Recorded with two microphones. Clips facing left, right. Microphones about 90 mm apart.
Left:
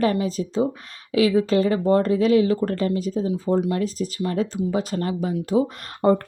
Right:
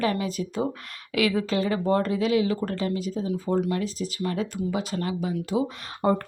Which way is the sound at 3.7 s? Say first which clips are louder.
Left 4 dB; 40° left (ahead or behind).